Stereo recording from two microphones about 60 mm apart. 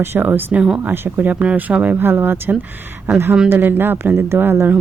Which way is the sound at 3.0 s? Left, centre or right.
Right.